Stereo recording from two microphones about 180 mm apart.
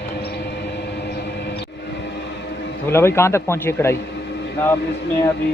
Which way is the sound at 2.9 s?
15° left (ahead or behind).